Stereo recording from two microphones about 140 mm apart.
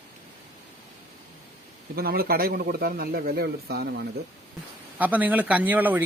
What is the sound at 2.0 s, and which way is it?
A man's voice, 90° right.